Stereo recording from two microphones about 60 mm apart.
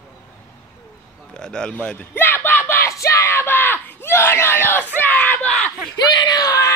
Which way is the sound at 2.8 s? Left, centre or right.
Left.